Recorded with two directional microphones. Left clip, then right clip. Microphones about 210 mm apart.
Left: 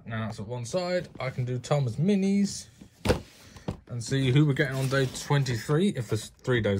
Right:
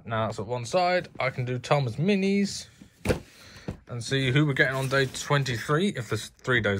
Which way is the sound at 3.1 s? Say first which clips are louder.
Left 1 dB; centre (ahead or behind).